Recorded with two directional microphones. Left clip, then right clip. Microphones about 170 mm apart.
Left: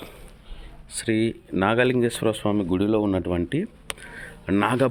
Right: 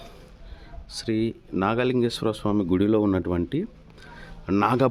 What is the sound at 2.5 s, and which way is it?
Speech, 25° right (ahead or behind).